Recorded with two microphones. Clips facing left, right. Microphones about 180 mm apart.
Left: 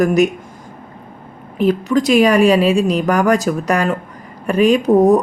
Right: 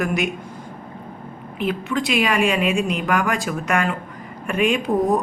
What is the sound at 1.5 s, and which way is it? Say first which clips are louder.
A woman's voice: left 8 dB; 40° left (ahead or behind).